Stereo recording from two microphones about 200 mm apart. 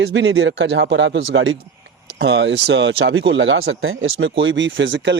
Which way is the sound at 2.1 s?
60° right (ahead or behind).